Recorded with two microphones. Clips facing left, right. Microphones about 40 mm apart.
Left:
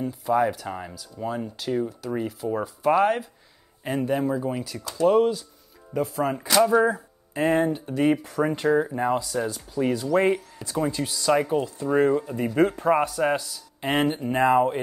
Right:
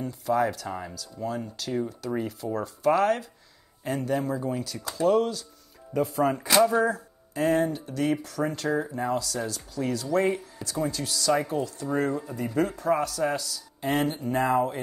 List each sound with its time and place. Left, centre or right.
0.0 s speech: centre
5.9 s speech: centre
6.7 s speech: centre
12.2 s speech: left